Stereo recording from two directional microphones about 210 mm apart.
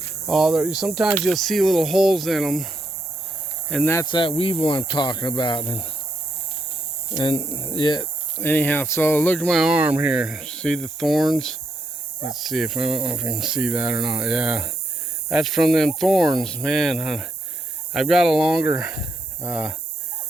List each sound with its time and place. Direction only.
0.3 s speech: centre (ahead or behind)
3.7 s speech: 5° left (ahead or behind)
3.9 s speech: 20° left (ahead or behind)
7.2 s speech: 25° left (ahead or behind)
8.4 s speech: 10° left (ahead or behind); by 19.7 s 5° right (ahead or behind)